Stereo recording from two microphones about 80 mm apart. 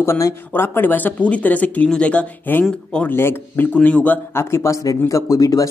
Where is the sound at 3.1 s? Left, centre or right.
Left.